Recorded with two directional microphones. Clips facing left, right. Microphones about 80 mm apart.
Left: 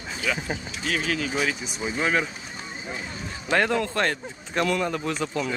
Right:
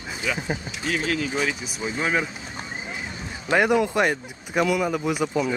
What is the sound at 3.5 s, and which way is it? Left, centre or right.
Speech, centre.